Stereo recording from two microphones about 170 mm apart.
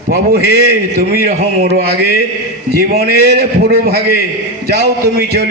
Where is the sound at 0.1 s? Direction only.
65° right (ahead or behind).